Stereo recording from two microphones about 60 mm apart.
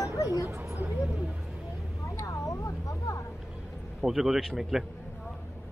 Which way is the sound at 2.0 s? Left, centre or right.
Left.